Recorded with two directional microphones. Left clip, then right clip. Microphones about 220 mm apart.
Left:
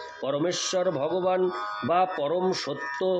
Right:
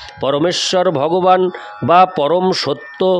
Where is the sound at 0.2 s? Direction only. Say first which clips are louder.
Right 12 dB; 45° right (ahead or behind).